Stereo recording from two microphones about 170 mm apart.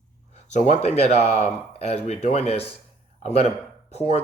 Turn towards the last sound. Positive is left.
turn(degrees=40)  # may be behind; listen again after turning